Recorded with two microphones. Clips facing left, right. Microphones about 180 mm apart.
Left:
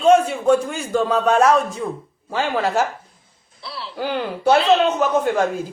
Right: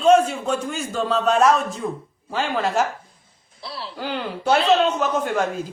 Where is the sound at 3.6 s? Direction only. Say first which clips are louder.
Even; 35° right (ahead or behind).